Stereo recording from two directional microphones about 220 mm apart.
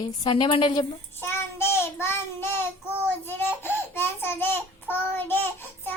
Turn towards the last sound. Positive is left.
turn(degrees=10)  # may be behind; listen again after turning